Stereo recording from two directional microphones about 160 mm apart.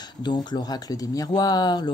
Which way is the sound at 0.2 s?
25° left (ahead or behind).